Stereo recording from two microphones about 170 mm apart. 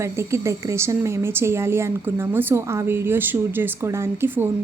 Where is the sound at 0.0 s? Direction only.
15° right (ahead or behind).